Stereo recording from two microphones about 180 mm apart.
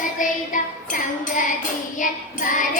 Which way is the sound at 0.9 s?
45° left (ahead or behind).